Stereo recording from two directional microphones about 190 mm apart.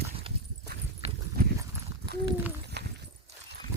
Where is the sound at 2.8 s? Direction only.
60° right (ahead or behind).